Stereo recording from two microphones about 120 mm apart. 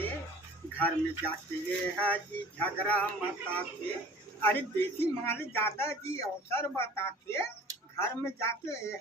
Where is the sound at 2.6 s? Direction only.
10° left (ahead or behind).